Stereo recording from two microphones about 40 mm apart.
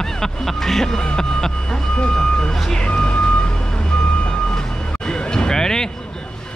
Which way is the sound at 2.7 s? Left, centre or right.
Left.